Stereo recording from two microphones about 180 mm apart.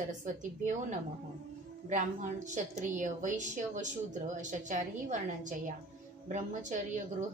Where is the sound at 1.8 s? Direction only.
45° right (ahead or behind).